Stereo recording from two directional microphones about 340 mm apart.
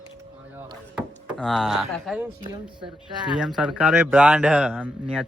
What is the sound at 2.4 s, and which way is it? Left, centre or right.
Speech, centre.